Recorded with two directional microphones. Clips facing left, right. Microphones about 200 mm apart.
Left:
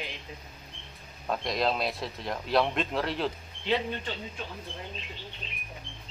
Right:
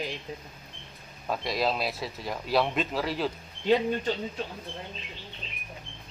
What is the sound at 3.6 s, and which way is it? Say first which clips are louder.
Speech: right 5 dB; 45° right (ahead or behind).